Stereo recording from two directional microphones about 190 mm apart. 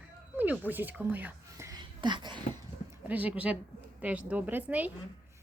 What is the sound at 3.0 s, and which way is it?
A woman's voice, 10° right (ahead or behind).